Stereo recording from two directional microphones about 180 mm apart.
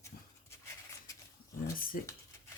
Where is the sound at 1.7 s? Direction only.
50° left (ahead or behind).